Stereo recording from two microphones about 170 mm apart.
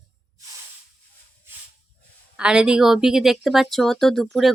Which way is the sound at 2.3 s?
5° right (ahead or behind).